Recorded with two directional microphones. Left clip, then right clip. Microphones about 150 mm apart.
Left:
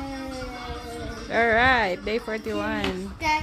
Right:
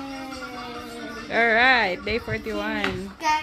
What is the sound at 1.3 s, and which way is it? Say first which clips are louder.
A woman's voice: right 1 dB; 10° left (ahead or behind).